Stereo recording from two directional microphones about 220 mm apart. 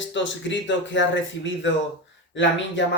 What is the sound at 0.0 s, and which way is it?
Speech, 55° left (ahead or behind).